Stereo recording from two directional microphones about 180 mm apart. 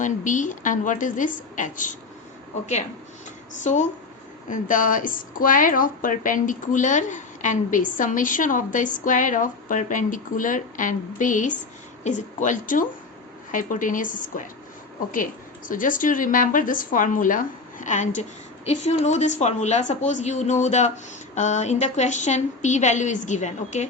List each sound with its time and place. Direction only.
0.0 s a woman's voice: 45° left (ahead or behind)
3.6 s a woman's voice: 45° left (ahead or behind)